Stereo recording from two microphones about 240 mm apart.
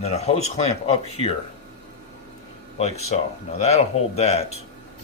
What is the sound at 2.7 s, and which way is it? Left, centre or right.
Speech, left.